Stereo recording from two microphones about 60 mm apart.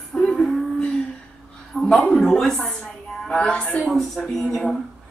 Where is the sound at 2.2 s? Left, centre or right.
Centre.